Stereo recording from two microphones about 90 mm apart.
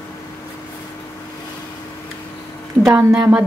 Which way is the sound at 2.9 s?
10° right (ahead or behind).